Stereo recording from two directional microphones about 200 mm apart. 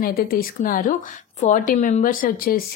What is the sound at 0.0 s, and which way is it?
A woman's voice, 45° left (ahead or behind).